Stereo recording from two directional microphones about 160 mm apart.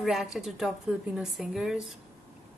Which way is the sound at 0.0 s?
Centre (ahead or behind).